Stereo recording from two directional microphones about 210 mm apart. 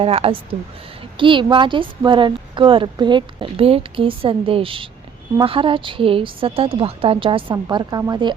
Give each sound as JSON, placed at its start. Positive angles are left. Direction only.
{"t": 0.0, "sound": "speech", "side_deg": -30}